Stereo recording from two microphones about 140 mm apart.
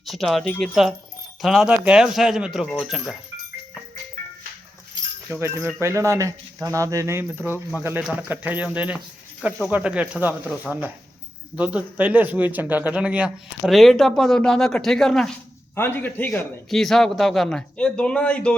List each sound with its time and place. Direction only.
0.0 s speech: centre (ahead or behind)
5.4 s speech: 20° right (ahead or behind); by 15.3 s 5° left (ahead or behind)
15.7 s a man's voice: 15° left (ahead or behind)
16.6 s speech: centre (ahead or behind)